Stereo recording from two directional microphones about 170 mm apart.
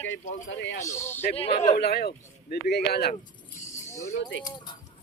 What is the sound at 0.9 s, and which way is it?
Speech, 15° left (ahead or behind).